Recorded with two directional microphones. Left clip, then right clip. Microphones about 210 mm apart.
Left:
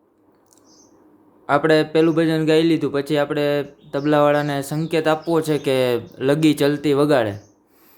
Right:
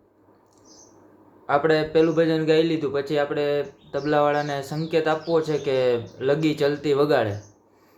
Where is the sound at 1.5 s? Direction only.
40° left (ahead or behind).